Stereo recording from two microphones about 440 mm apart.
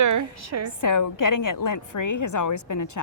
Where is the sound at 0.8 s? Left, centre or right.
Left.